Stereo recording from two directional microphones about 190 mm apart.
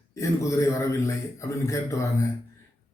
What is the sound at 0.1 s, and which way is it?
A man's voice, 15° left (ahead or behind).